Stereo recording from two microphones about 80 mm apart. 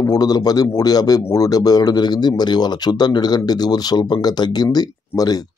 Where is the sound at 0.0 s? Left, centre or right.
Left.